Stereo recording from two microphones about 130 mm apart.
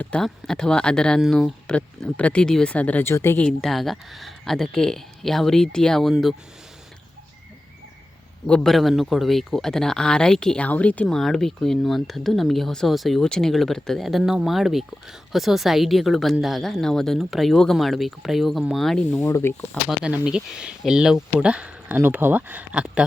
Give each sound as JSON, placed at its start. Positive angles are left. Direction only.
{"t": 0.0, "sound": "speech", "side_deg": 5}
{"t": 3.4, "sound": "speech", "side_deg": 0}
{"t": 8.4, "sound": "speech", "side_deg": 5}
{"t": 19.2, "sound": "speech", "side_deg": 20}
{"t": 19.7, "sound": "speech", "side_deg": -5}